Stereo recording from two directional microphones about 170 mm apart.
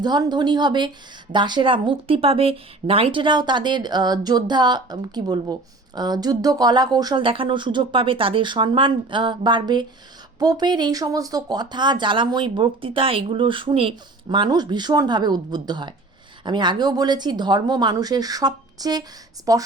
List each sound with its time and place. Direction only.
0.0 s speech: 25° right (ahead or behind)